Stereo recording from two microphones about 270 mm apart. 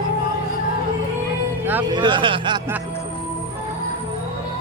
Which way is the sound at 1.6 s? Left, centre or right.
Centre.